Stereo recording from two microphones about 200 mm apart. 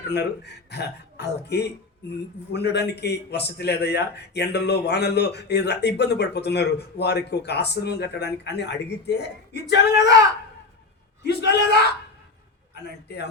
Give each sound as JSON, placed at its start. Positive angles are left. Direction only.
{"t": 0.1, "sound": "a man's voice", "side_deg": 55}
{"t": 11.2, "sound": "a man's voice", "side_deg": 55}